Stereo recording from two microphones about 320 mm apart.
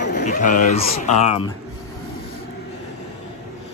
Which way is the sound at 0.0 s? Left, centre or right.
Left.